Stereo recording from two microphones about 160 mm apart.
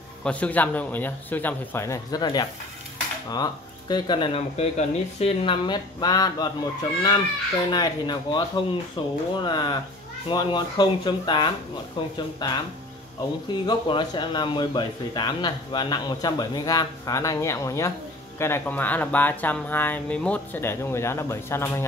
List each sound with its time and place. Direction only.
0.2 s speech: 10° left (ahead or behind); by 2.4 s 25° left (ahead or behind)
3.9 s speech: 30° left (ahead or behind)